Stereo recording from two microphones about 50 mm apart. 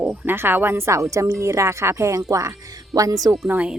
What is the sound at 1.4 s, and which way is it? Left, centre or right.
Speech, right.